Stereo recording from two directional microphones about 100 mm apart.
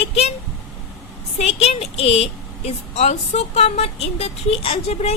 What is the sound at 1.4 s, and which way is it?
A woman's voice, 90° left.